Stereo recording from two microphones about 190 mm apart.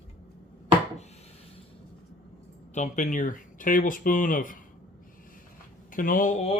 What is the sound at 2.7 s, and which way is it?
Speech, 40° left (ahead or behind).